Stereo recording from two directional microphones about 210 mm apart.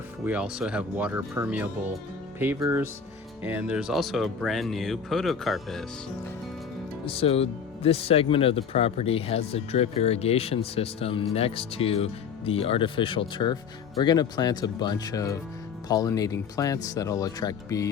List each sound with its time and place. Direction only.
0.3 s speech: 5° right (ahead or behind)
7.0 s speech: 25° left (ahead or behind)